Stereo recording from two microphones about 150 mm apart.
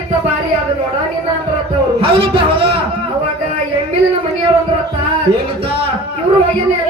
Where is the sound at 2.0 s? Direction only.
35° right (ahead or behind).